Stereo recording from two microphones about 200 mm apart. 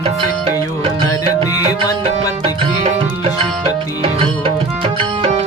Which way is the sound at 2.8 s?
30° right (ahead or behind).